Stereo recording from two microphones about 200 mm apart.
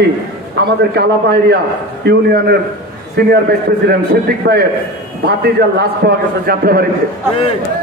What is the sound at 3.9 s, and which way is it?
A man's voice, 50° right (ahead or behind).